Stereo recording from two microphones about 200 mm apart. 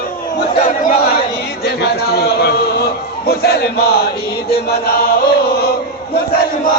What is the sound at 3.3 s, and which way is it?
Chant, 50° left (ahead or behind).